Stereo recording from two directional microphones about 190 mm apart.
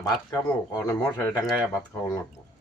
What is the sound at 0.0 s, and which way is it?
Speech, 15° left (ahead or behind).